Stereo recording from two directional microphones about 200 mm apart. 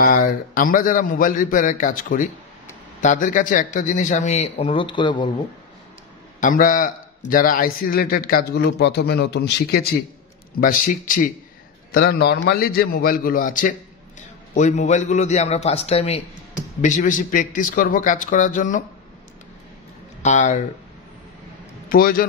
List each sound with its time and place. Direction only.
0.0 s a man's voice: 45° left (ahead or behind); by 5.3 s 25° left (ahead or behind)
6.4 s a man's voice: 40° left (ahead or behind)
16.8 s a man's voice: 40° left (ahead or behind)
20.2 s speech: 35° left (ahead or behind)
21.8 s a man's voice: 45° left (ahead or behind)